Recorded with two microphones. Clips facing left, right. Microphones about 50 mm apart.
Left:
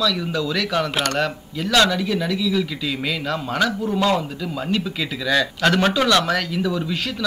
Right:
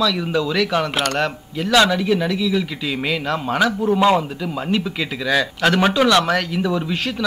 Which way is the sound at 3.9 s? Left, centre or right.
Right.